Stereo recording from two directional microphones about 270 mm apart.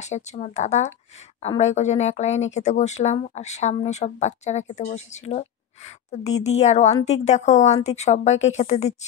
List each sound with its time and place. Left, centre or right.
0.0 s speech: left